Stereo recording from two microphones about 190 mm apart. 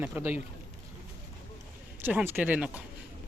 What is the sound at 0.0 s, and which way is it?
Speech, 10° right (ahead or behind).